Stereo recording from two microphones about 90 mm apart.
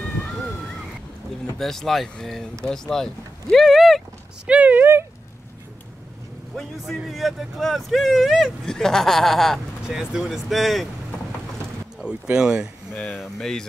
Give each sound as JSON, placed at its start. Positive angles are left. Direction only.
{"t": 1.6, "sound": "speech", "side_deg": 5}
{"t": 4.5, "sound": "speech", "side_deg": -20}
{"t": 7.1, "sound": "speech", "side_deg": 0}
{"t": 12.0, "sound": "speech", "side_deg": -10}
{"t": 12.9, "sound": "speech", "side_deg": 15}
{"t": 13.2, "sound": "speech", "side_deg": 5}